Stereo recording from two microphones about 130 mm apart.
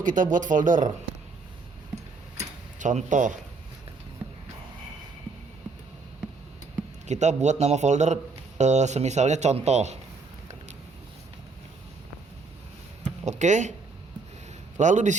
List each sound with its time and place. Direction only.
0.0 s speech: 90° right
2.4 s a sound: 70° right (ahead or behind)
7.1 s a man's voice: 65° right (ahead or behind)
13.2 s speech: 65° right (ahead or behind)
14.8 s speech: 70° right (ahead or behind)